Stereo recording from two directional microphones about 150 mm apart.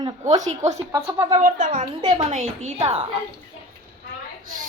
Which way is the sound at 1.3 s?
55° right (ahead or behind).